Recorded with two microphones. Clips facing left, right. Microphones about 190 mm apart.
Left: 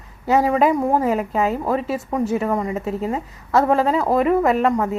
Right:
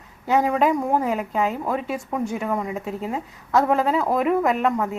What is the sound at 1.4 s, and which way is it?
Speech, 35° left (ahead or behind).